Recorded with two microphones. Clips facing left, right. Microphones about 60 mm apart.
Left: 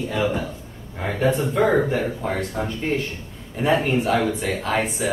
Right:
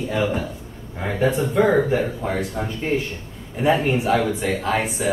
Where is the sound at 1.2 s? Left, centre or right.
Centre.